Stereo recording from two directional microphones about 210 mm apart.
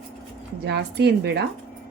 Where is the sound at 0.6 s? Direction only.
55° right (ahead or behind).